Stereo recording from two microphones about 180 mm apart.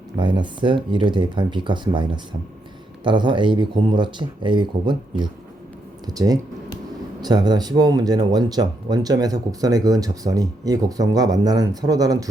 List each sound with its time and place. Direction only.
0.2 s speech: 25° right (ahead or behind)